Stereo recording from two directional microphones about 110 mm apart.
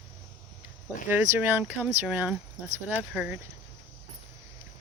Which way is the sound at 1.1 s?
15° right (ahead or behind).